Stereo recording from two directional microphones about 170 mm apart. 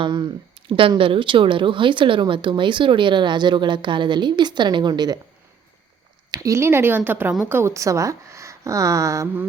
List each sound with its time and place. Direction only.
0.0 s speech: 30° right (ahead or behind)
6.3 s a woman's voice: 20° right (ahead or behind)